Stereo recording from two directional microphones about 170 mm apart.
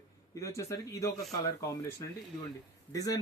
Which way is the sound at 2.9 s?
20° left (ahead or behind).